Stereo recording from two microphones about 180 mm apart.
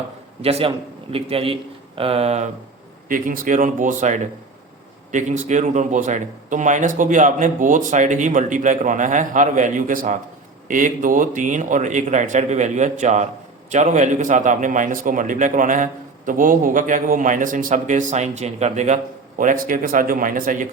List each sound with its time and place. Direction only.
0.4 s speech: 35° right (ahead or behind)
3.1 s a man's voice: 50° right (ahead or behind)